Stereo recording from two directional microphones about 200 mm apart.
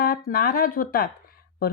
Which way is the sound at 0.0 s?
50° left (ahead or behind).